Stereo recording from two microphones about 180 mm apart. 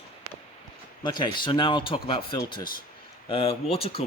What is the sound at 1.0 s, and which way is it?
Speech, 25° left (ahead or behind).